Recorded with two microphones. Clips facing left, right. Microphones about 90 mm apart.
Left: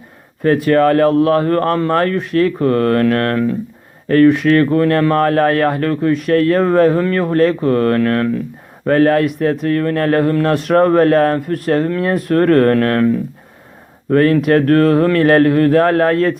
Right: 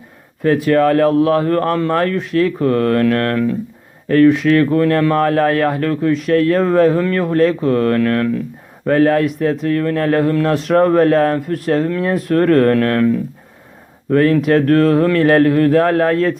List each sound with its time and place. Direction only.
0.4 s speech: 45° left (ahead or behind)
4.1 s speech: 50° left (ahead or behind)
8.8 s speech: 50° left (ahead or behind)
14.1 s speech: 50° left (ahead or behind)